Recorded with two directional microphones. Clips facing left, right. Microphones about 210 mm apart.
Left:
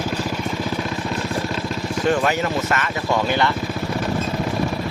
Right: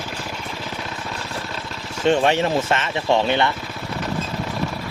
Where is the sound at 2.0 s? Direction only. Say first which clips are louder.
Right 3 dB; 25° right (ahead or behind).